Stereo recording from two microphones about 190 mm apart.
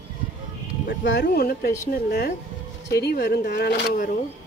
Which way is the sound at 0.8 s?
65° left (ahead or behind).